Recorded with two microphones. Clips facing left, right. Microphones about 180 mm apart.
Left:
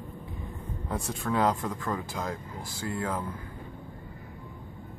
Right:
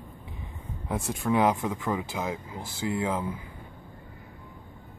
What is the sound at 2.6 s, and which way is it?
Speech, 20° right (ahead or behind).